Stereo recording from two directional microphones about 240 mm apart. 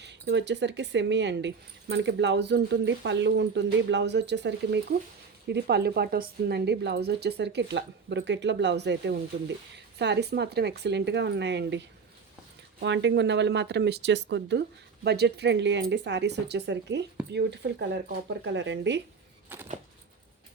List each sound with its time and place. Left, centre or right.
0.0 s speech: right
12.8 s speech: right
19.5 s a sound: centre